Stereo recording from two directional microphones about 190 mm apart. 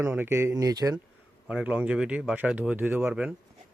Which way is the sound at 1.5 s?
5° right (ahead or behind).